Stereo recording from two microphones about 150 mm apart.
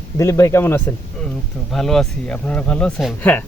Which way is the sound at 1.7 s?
Centre (ahead or behind).